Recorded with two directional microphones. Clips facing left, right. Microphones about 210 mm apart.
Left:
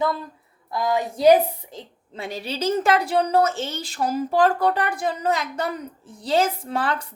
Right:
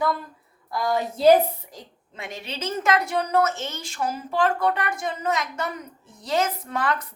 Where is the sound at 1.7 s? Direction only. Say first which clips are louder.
Left 5 dB; 30° left (ahead or behind).